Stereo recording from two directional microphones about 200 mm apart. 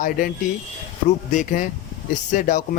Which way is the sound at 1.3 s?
40° left (ahead or behind).